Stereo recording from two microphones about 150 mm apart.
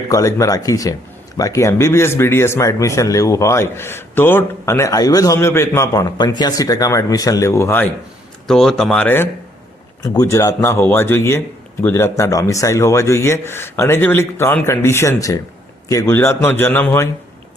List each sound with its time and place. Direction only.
0.1 s speech: 20° left (ahead or behind)
8.4 s a man's voice: 5° left (ahead or behind)